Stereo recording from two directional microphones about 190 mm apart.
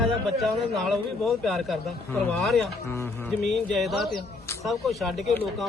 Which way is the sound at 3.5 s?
Centre (ahead or behind).